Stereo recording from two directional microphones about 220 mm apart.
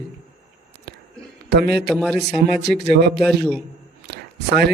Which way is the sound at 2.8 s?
50° right (ahead or behind).